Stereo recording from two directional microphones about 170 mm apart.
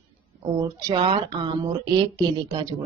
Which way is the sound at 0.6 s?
20° right (ahead or behind).